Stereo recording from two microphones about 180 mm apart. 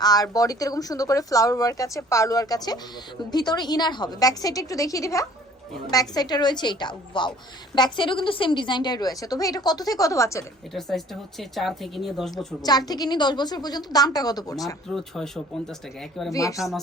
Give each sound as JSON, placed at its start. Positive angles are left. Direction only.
{"t": 0.0, "sound": "speech", "side_deg": 20}
{"t": 10.8, "sound": "speech", "side_deg": 0}
{"t": 12.6, "sound": "speech", "side_deg": 20}
{"t": 14.9, "sound": "speech", "side_deg": 5}
{"t": 16.3, "sound": "speech", "side_deg": 20}